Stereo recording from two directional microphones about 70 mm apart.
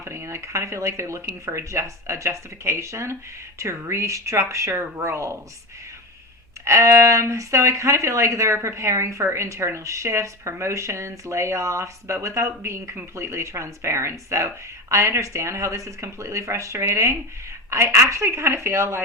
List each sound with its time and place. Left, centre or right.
0.0 s speech: right
6.7 s speech: right